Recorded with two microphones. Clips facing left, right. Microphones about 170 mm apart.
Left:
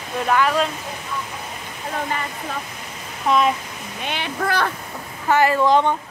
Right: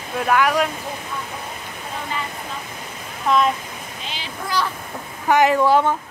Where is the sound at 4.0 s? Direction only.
60° left (ahead or behind).